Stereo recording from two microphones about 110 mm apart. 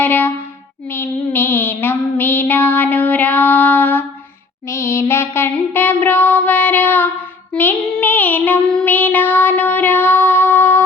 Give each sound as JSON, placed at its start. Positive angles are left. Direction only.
{"t": 0.0, "sound": "a sound", "side_deg": 15}
{"t": 0.9, "sound": "child singing", "side_deg": 20}
{"t": 4.7, "sound": "music", "side_deg": 25}
{"t": 7.5, "sound": "child singing", "side_deg": 20}